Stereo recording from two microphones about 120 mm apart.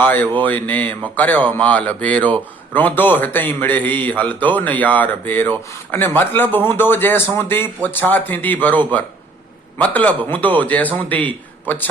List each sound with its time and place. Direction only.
0.0 s speech: 15° left (ahead or behind)